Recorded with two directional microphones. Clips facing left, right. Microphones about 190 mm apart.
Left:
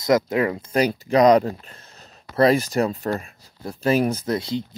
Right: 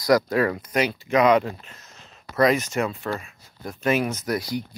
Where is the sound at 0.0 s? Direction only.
20° left (ahead or behind).